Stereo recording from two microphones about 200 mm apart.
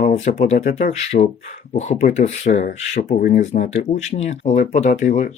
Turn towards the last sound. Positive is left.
turn(degrees=35)  # may be behind; listen again after turning